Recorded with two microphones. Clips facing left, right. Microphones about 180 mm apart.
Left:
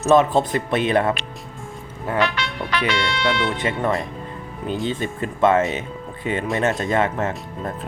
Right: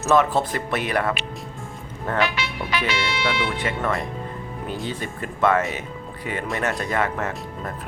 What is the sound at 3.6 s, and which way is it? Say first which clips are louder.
Speech: left 3 dB; 20° left (ahead or behind).